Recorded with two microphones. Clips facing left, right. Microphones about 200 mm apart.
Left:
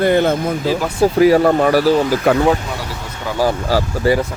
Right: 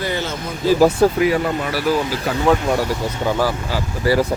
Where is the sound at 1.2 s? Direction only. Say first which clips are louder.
Left 7 dB; 40° left (ahead or behind).